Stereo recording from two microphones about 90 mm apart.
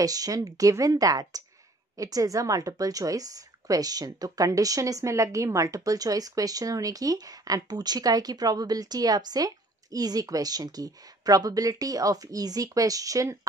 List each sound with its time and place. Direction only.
0.0 s a woman's voice: 40° right (ahead or behind)